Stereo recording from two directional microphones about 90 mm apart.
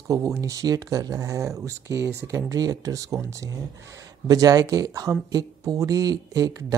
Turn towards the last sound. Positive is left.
turn(degrees=-40)  # may be behind; listen again after turning